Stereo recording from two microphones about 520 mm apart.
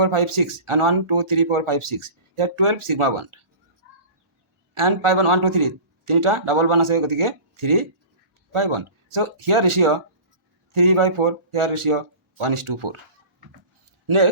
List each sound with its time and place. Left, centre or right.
0.0 s speech: right
4.7 s speech: right